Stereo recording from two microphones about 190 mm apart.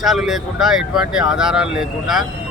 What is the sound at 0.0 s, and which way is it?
Speech, centre (ahead or behind).